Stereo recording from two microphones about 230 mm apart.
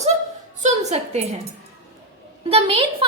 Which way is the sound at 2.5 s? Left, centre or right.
Right.